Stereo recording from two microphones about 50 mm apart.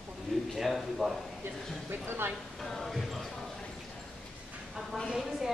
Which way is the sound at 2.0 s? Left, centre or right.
Right.